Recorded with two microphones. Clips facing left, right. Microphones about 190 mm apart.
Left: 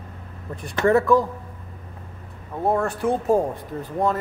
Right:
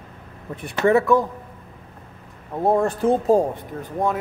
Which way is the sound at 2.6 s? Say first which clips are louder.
Right 3 dB; 15° right (ahead or behind).